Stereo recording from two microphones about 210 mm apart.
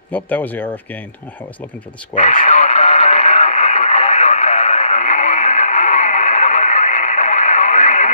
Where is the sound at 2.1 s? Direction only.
35° left (ahead or behind).